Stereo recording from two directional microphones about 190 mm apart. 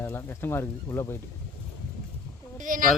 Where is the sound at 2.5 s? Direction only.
45° right (ahead or behind).